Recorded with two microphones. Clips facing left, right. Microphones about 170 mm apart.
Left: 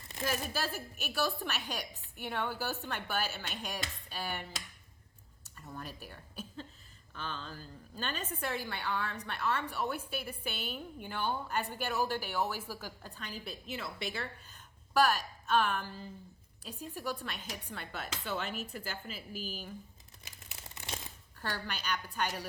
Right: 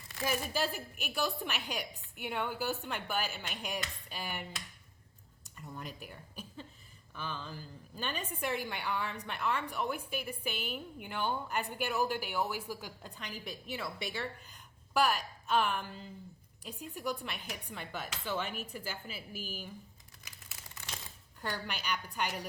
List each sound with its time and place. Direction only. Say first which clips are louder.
0.3 s a woman's voice: right 2 dB; 15° right (ahead or behind)
5.4 s a sound: even; 15° right (ahead or behind)
7.1 s a woman's voice: right 1 dB; 10° right (ahead or behind)
14.5 s a sound: left 4 dB; 10° right (ahead or behind)
16.9 s a woman's voice: right 1 dB; 15° right (ahead or behind)
19.3 s speech: left 3 dB; 50° right (ahead or behind)
20.2 s crumpling: left 2 dB; 25° left (ahead or behind)
21.5 s a woman's voice: even; 10° right (ahead or behind)